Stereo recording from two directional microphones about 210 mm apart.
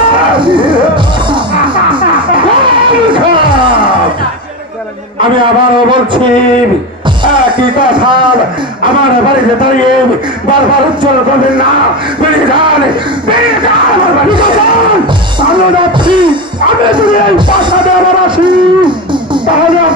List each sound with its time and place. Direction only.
0.4 s music: 25° right (ahead or behind)
3.1 s a sound: 25° right (ahead or behind)
5.9 s a sound: 25° right (ahead or behind)
7.3 s speech: 20° right (ahead or behind)
12.2 s speech: 25° right (ahead or behind)
14.3 s speech: 20° right (ahead or behind)
16.1 s music: 20° right (ahead or behind)
16.9 s speech: 20° right (ahead or behind)